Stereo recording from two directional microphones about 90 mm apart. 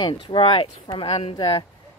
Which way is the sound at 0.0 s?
65° left (ahead or behind).